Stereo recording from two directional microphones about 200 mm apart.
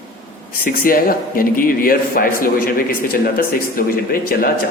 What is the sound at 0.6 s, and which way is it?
A man's voice, 45° left (ahead or behind).